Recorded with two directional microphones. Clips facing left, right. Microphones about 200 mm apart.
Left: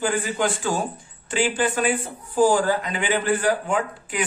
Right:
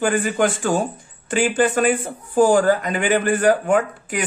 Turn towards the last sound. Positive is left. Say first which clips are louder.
# right 4 dB
turn(degrees=-45)  # may be behind; listen again after turning